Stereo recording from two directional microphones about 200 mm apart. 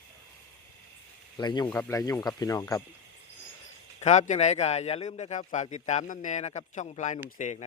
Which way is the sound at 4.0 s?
35° left (ahead or behind).